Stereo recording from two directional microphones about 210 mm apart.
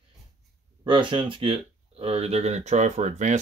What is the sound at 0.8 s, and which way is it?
Speech, 25° right (ahead or behind).